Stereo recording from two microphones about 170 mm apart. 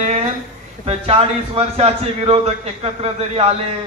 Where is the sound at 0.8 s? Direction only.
35° right (ahead or behind).